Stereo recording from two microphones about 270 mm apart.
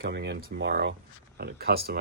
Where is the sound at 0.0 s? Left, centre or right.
Right.